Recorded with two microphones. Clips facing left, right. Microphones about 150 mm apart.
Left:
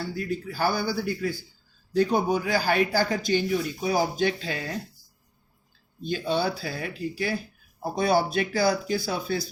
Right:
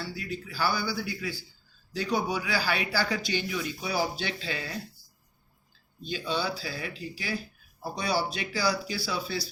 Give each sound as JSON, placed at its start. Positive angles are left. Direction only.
{"t": 0.0, "sound": "speech", "side_deg": 50}
{"t": 6.0, "sound": "speech", "side_deg": 50}